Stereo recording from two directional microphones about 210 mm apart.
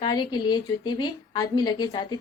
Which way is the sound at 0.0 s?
20° left (ahead or behind).